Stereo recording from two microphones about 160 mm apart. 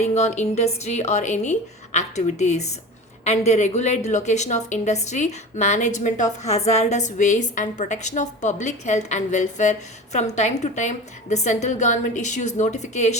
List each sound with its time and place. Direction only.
0.0 s a woman's voice: 45° left (ahead or behind)